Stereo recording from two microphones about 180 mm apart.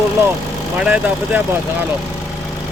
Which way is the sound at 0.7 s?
5° right (ahead or behind).